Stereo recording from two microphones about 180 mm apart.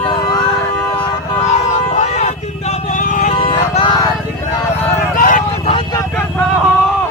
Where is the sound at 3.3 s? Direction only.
30° left (ahead or behind).